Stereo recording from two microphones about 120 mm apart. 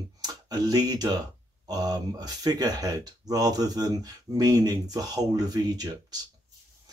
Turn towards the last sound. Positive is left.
turn(degrees=-35)  # may be behind; listen again after turning